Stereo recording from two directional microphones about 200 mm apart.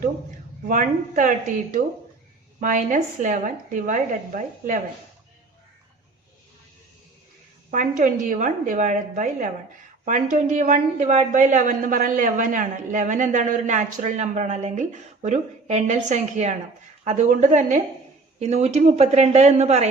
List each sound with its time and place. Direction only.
0.7 s a woman's voice: 40° right (ahead or behind)
7.7 s a woman's voice: 40° right (ahead or behind)